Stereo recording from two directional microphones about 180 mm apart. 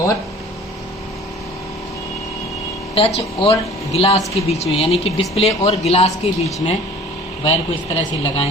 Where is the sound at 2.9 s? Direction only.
35° left (ahead or behind).